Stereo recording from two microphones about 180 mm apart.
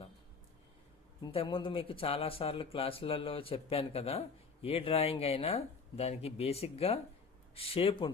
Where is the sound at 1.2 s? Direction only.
30° left (ahead or behind).